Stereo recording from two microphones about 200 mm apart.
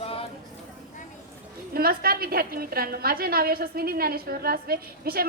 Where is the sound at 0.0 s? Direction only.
30° left (ahead or behind).